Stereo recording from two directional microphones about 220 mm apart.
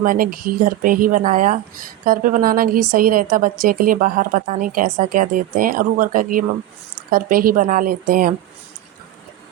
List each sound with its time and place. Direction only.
0.0 s a woman's voice: 40° right (ahead or behind)